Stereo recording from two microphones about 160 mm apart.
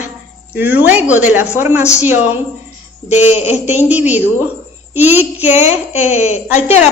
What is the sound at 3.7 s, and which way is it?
A woman's voice, 10° right (ahead or behind).